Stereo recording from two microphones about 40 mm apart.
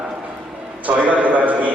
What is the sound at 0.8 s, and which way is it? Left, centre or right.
Speech, right.